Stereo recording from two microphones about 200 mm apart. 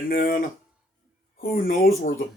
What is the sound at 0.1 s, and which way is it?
Speech, 45° left (ahead or behind).